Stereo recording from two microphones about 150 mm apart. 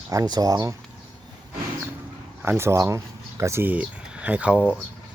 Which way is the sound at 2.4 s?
15° right (ahead or behind).